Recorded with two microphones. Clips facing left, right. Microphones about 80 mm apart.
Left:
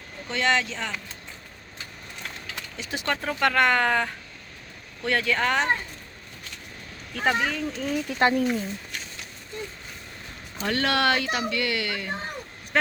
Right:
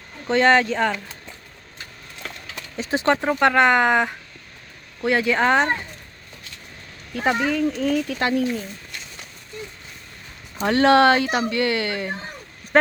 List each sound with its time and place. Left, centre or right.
0.3 s speech: right
2.7 s speech: right
7.1 s speech: centre
7.9 s speech: centre
10.6 s speech: right